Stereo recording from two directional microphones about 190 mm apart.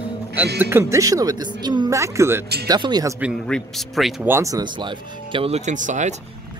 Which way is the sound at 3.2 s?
Centre (ahead or behind).